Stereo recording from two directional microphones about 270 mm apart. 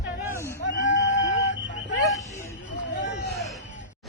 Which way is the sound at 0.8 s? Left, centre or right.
Left.